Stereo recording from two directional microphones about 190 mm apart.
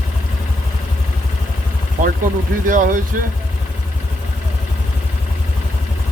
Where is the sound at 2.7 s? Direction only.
45° right (ahead or behind).